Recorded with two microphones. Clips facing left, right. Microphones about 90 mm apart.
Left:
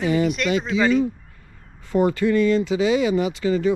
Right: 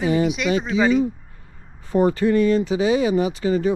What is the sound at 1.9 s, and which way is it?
Speech, 35° right (ahead or behind).